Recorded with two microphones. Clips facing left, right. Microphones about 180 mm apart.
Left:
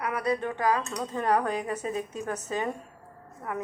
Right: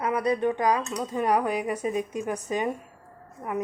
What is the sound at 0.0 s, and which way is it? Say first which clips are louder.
Speech: right 4 dB; 20° right (ahead or behind).